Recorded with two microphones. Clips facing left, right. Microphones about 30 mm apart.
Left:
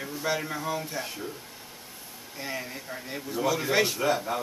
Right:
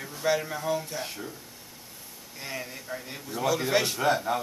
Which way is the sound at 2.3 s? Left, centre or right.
Centre.